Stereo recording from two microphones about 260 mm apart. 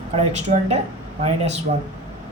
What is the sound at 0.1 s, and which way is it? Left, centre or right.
Speech, right.